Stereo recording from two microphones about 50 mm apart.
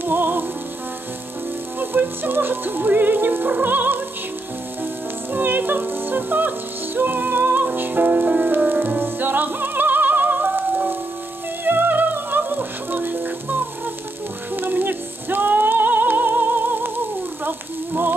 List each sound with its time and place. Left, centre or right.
0.0 s music: right
1.8 s music: right
5.3 s music: right
17.5 s a sound: right